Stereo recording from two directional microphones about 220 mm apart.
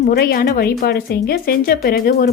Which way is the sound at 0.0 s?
45° left (ahead or behind).